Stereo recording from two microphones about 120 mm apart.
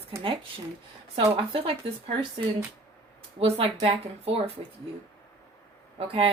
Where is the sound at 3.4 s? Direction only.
55° right (ahead or behind).